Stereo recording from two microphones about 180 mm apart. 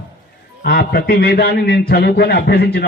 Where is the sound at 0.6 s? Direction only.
60° left (ahead or behind).